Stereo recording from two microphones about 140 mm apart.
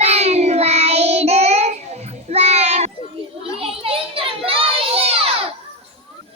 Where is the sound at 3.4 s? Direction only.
45° right (ahead or behind).